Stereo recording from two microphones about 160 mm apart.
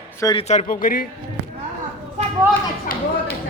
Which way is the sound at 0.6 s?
60° left (ahead or behind).